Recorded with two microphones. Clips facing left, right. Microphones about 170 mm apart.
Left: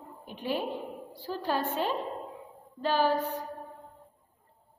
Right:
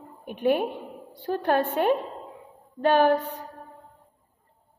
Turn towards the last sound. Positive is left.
turn(degrees=-65)  # may be behind; listen again after turning